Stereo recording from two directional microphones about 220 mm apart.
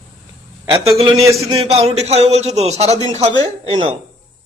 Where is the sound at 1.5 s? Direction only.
25° right (ahead or behind).